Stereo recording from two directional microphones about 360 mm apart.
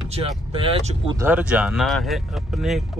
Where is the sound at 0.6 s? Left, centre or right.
Centre.